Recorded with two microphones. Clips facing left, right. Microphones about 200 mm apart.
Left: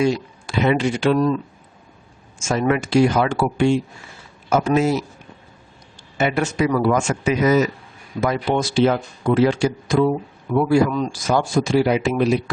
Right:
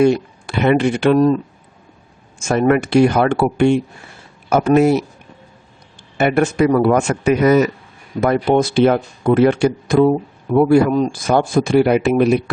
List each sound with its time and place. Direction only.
0.0 s speech: 60° right (ahead or behind)
2.5 s speech: 55° right (ahead or behind)
6.1 s speech: 55° right (ahead or behind)
10.8 s speech: 55° right (ahead or behind)